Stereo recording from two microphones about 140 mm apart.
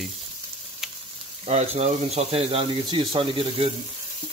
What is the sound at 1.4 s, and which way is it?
Speech, 50° right (ahead or behind).